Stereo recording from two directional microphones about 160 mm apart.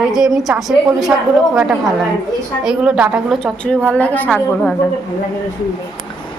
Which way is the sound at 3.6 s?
5° left (ahead or behind).